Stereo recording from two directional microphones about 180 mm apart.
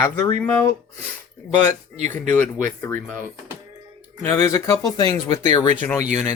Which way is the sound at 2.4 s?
45° right (ahead or behind).